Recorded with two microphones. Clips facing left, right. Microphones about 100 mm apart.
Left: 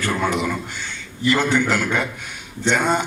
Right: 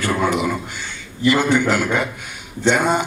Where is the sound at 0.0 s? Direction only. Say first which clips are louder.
Right 2 dB; 10° right (ahead or behind).